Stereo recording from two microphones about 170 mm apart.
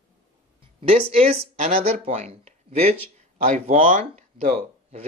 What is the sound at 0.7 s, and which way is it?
Speech, 35° right (ahead or behind).